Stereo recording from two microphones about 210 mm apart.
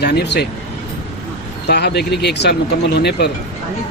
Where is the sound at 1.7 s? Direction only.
50° left (ahead or behind).